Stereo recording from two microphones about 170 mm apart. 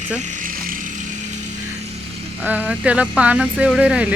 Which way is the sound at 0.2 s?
45° right (ahead or behind).